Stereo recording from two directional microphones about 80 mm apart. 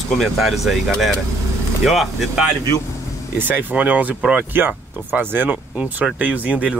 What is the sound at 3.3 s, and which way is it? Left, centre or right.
Speech, right.